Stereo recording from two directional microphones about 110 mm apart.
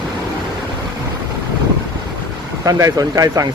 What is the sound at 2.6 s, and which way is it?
Speech, 35° right (ahead or behind).